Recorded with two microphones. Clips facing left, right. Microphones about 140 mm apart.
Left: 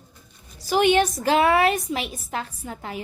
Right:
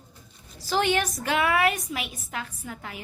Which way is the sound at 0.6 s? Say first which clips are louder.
Left 6 dB; 15° left (ahead or behind).